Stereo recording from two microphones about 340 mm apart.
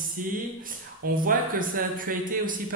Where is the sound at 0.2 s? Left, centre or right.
Right.